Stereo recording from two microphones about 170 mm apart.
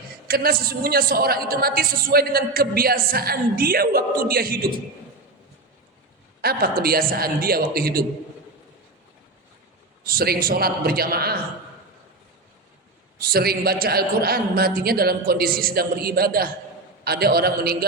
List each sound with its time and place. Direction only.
0.3 s a woman's voice: 65° right (ahead or behind)
6.4 s a woman's voice: 65° right (ahead or behind)
10.0 s a woman's voice: 60° right (ahead or behind)
13.1 s a woman's voice: 60° right (ahead or behind)